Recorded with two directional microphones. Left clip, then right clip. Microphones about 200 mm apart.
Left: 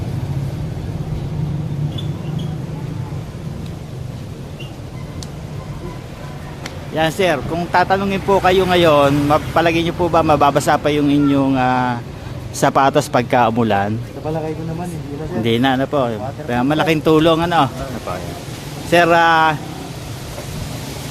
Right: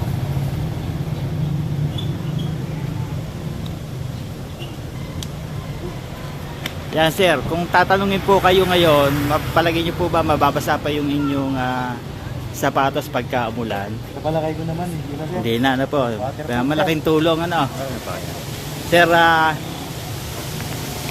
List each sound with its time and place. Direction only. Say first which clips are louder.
6.9 s speech: even; 5° left (ahead or behind); by 13.9 s 50° left (ahead or behind)
15.4 s speech: left 3 dB; 25° left (ahead or behind)
18.9 s speech: left 1 dB; 25° left (ahead or behind)